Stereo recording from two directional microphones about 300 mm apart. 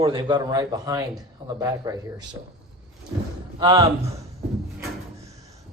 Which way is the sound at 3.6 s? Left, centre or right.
Centre.